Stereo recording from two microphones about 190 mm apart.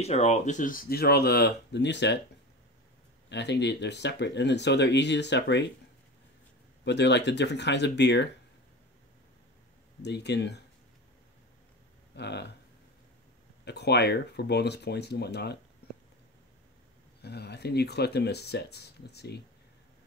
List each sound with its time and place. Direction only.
0.0 s speech: 35° left (ahead or behind); by 2.1 s 65° left (ahead or behind)
3.3 s speech: 65° left (ahead or behind)
6.8 s speech: 65° left (ahead or behind)
10.0 s speech: 60° left (ahead or behind)
12.2 s speech: 60° left (ahead or behind)
13.7 s speech: 60° left (ahead or behind)
17.2 s speech: 60° left (ahead or behind)